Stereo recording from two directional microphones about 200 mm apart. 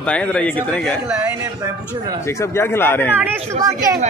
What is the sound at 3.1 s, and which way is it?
Speech, 10° right (ahead or behind).